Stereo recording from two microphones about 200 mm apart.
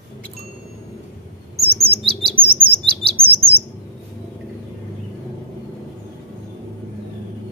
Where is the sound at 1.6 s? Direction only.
30° right (ahead or behind).